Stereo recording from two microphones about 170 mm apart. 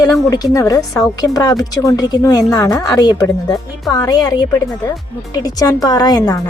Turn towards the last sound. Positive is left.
turn(degrees=20)  # may be behind; listen again after turning